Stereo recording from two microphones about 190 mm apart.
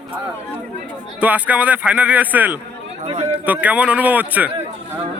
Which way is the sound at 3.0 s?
35° right (ahead or behind).